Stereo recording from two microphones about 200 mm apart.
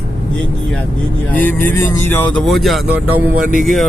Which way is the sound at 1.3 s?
10° left (ahead or behind).